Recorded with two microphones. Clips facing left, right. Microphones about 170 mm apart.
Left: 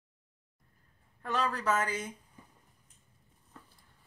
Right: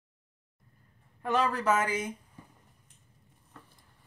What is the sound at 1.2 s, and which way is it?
Speech, 10° right (ahead or behind).